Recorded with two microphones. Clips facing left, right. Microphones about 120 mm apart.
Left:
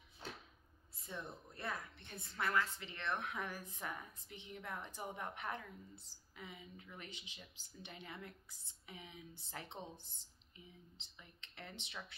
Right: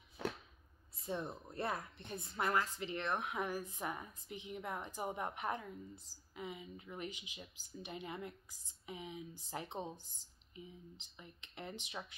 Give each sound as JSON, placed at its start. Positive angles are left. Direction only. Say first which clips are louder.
{"t": 0.2, "sound": "a sound", "louder": "right 10 dB", "side_deg": -90}
{"t": 1.0, "sound": "speech", "louder": "right 7 dB", "side_deg": -25}
{"t": 2.0, "sound": "a woman's voice", "louder": "right 4 dB", "side_deg": -20}
{"t": 11.0, "sound": "speech", "louder": "right 5 dB", "side_deg": -15}